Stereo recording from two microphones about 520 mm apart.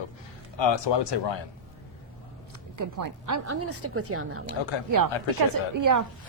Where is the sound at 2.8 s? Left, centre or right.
Right.